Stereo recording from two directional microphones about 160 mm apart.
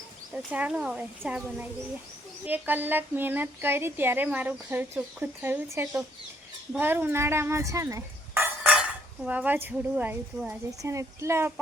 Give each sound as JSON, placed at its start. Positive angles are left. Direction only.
{"t": 0.3, "sound": "speech", "side_deg": -10}